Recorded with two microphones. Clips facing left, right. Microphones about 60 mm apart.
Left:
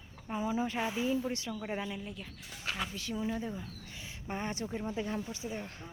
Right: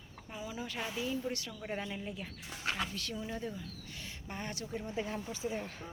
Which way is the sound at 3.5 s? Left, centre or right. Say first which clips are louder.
Left 2 dB; centre.